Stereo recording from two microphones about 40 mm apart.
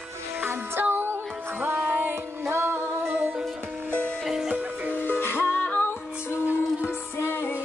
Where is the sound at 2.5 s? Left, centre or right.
Right.